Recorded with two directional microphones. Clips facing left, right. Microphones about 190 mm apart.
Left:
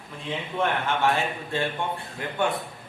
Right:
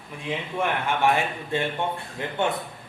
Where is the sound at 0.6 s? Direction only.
15° right (ahead or behind).